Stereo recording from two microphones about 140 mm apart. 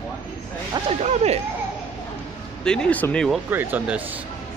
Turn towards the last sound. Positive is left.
turn(degrees=-10)  # may be behind; listen again after turning